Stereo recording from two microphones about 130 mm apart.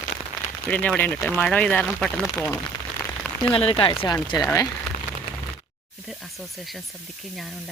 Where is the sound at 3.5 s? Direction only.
45° left (ahead or behind).